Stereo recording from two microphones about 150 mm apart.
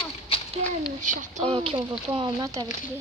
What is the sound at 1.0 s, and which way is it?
Speech, 60° right (ahead or behind).